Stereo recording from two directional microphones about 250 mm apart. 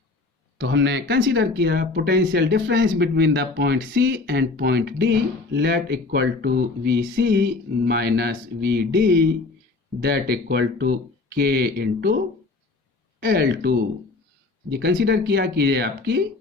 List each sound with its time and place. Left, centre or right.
0.6 s speech: right
13.1 s speech: right